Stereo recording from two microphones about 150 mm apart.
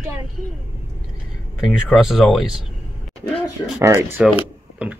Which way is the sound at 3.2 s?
25° left (ahead or behind).